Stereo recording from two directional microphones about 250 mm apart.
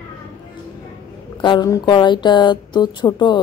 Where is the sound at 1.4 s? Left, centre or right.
Centre.